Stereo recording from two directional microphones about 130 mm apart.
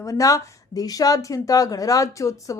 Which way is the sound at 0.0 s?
25° left (ahead or behind).